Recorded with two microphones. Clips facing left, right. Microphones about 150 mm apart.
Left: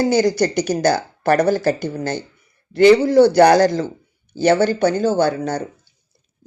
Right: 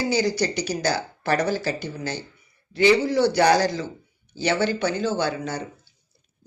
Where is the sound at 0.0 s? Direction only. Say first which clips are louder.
Left 7 dB; 45° left (ahead or behind).